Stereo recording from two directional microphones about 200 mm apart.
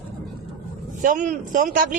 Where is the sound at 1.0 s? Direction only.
40° right (ahead or behind).